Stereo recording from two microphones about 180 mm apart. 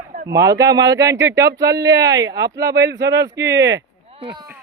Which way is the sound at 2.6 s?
60° right (ahead or behind).